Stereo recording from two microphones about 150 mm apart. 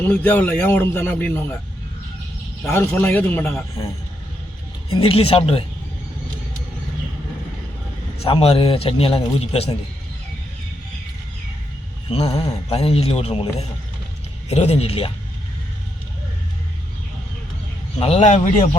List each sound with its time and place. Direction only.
0.1 s speech: 10° left (ahead or behind)
2.9 s speech: 10° left (ahead or behind)
4.9 s a man's voice: 40° left (ahead or behind)
8.2 s a man's voice: 40° left (ahead or behind)
12.0 s speech: 40° left (ahead or behind)
12.4 s speech: 25° left (ahead or behind)
12.7 s a man's voice: 40° left (ahead or behind)
18.0 s speech: 45° left (ahead or behind)